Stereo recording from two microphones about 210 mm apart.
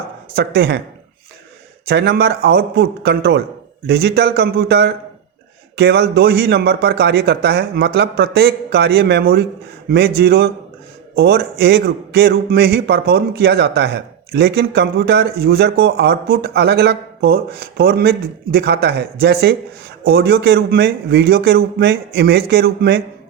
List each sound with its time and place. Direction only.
0.3 s a man's voice: 50° right (ahead or behind)
1.9 s a man's voice: 50° right (ahead or behind)